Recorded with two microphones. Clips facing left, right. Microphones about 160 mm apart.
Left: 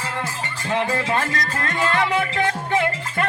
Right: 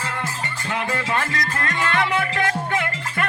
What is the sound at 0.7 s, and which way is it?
Music, 30° left (ahead or behind).